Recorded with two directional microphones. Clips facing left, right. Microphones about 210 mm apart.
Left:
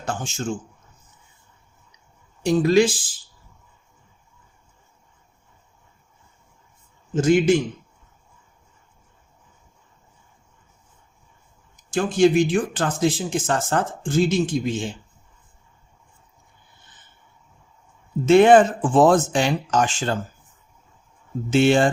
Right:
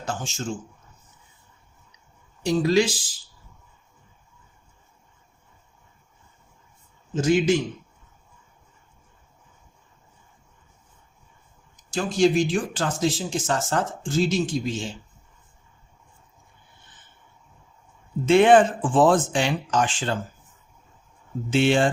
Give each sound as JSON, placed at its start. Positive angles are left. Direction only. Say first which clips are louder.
{"t": 0.0, "sound": "a sound", "louder": "left 2 dB", "side_deg": 55}
{"t": 2.4, "sound": "speech", "louder": "left 3 dB", "side_deg": 50}
{"t": 7.2, "sound": "speech", "louder": "left 3 dB", "side_deg": 50}
{"t": 11.9, "sound": "speech", "louder": "left 3 dB", "side_deg": 55}
{"t": 18.3, "sound": "speech", "louder": "left 3 dB", "side_deg": 40}
{"t": 21.5, "sound": "speech", "louder": "left 3 dB", "side_deg": 45}